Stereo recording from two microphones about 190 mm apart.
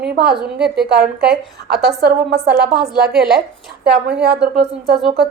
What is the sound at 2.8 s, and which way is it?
Speech, 55° right (ahead or behind).